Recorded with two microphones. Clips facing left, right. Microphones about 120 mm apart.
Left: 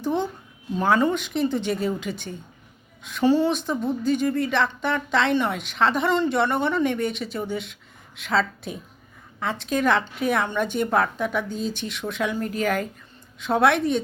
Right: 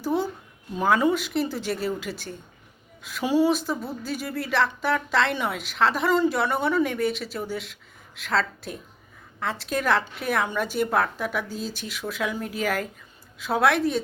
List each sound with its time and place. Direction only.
0.0 s speech: 5° right (ahead or behind)